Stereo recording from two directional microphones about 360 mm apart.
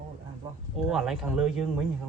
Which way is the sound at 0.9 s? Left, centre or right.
Centre.